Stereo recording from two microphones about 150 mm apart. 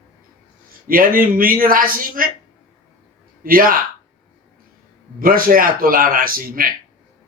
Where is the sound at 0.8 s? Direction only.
70° right (ahead or behind).